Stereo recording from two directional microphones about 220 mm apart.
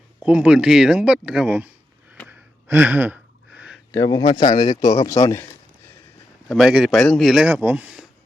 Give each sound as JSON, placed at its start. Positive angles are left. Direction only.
{"t": 0.2, "sound": "speech", "side_deg": -5}
{"t": 2.1, "sound": "a sound", "side_deg": -5}
{"t": 3.9, "sound": "speech", "side_deg": 15}
{"t": 4.2, "sound": "speech", "side_deg": 25}
{"t": 6.5, "sound": "speech", "side_deg": 0}